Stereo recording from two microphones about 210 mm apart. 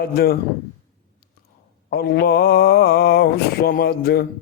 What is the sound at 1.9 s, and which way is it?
Speech, 50° left (ahead or behind).